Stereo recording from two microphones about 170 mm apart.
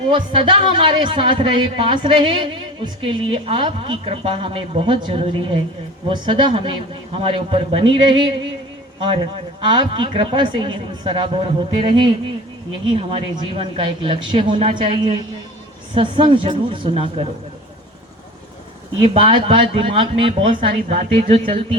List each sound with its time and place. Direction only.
0.1 s speech: 30° right (ahead or behind)
9.6 s speech: 30° right (ahead or behind)
19.0 s speech: 30° right (ahead or behind)